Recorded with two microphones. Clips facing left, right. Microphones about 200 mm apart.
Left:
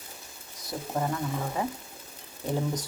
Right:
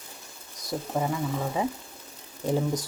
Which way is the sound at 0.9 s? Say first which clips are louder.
Right 1 dB; 10° right (ahead or behind).